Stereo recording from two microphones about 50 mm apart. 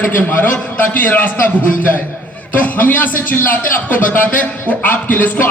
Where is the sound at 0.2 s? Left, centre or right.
Left.